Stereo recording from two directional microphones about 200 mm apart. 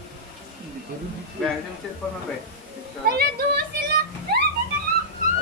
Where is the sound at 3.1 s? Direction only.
50° right (ahead or behind).